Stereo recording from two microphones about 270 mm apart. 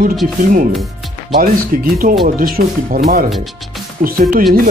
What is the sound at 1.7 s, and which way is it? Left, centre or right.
Speech, right.